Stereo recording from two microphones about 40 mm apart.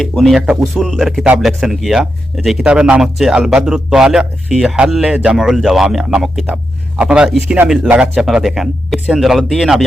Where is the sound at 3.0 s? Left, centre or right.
Centre.